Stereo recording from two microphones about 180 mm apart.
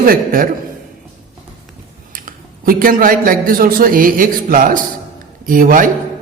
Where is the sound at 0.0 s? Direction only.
50° right (ahead or behind).